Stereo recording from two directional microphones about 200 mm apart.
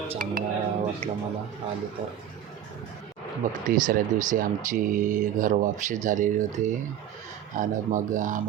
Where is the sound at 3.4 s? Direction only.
40° right (ahead or behind).